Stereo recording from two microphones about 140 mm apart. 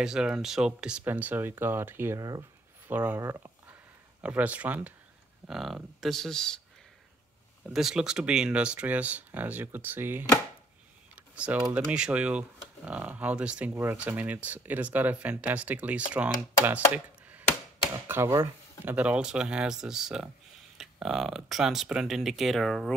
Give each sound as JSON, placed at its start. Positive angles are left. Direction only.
{"t": 0.0, "sound": "speech", "side_deg": -5}
{"t": 2.9, "sound": "speech", "side_deg": -10}
{"t": 3.2, "sound": "speech", "side_deg": -20}
{"t": 4.2, "sound": "speech", "side_deg": -10}
{"t": 7.7, "sound": "speech", "side_deg": -5}
{"t": 11.1, "sound": "a sound", "side_deg": -10}
{"t": 11.7, "sound": "speech", "side_deg": -5}
{"t": 16.9, "sound": "chopping", "side_deg": -10}
{"t": 18.0, "sound": "speech", "side_deg": -20}